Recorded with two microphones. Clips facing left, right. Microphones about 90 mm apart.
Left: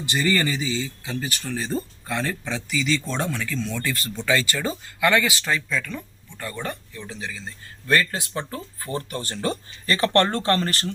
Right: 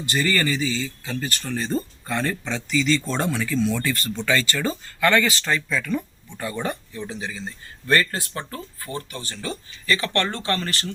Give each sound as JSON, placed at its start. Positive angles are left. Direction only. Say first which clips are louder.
{"t": 0.1, "sound": "speech", "louder": "even", "side_deg": 15}
{"t": 5.6, "sound": "speech", "louder": "right 3 dB", "side_deg": -5}
{"t": 7.9, "sound": "speech", "louder": "right 1 dB", "side_deg": 5}
{"t": 8.4, "sound": "speech", "louder": "left 1 dB", "side_deg": 15}
{"t": 8.9, "sound": "speech", "louder": "left 4 dB", "side_deg": 35}